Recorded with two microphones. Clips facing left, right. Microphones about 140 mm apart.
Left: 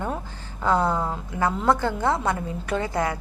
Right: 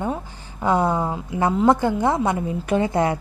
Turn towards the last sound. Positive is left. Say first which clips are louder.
# right 5 dB
turn(degrees=-25)  # may be behind; listen again after turning